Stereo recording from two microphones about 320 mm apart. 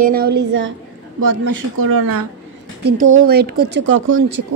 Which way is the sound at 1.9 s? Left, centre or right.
Right.